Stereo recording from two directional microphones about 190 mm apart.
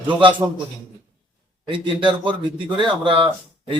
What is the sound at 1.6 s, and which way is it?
A man's voice, 25° right (ahead or behind).